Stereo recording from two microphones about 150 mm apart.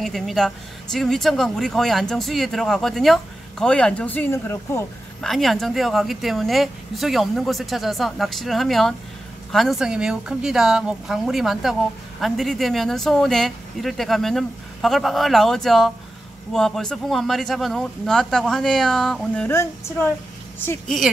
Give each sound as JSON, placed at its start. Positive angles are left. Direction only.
{"t": 0.0, "sound": "speech", "side_deg": 0}
{"t": 5.2, "sound": "speech", "side_deg": 0}
{"t": 19.4, "sound": "a woman's voice", "side_deg": 15}